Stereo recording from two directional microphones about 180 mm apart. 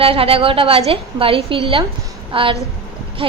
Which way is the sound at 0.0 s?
30° right (ahead or behind).